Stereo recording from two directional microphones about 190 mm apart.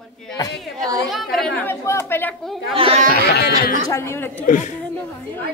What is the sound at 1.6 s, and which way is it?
Speech, 15° left (ahead or behind).